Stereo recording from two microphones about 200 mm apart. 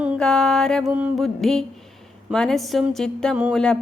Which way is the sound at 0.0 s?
Centre (ahead or behind).